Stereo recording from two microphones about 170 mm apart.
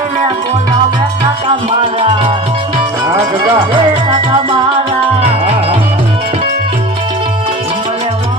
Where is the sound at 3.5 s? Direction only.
30° right (ahead or behind).